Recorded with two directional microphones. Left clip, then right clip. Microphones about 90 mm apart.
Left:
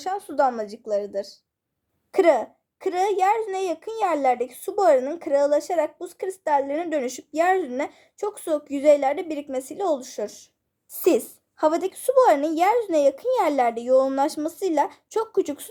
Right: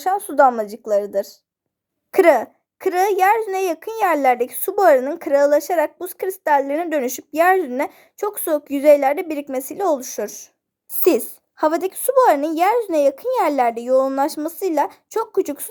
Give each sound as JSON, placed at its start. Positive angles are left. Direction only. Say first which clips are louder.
{"t": 0.0, "sound": "a woman's voice", "louder": "right 8 dB", "side_deg": -45}